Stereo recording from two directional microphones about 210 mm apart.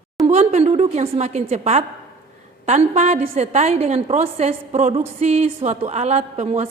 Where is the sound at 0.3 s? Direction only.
30° right (ahead or behind).